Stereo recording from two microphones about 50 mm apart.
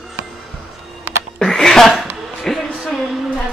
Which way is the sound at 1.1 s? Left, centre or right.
Right.